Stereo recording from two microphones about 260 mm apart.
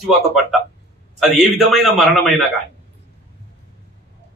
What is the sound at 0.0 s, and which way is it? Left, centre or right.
A man's voice, centre.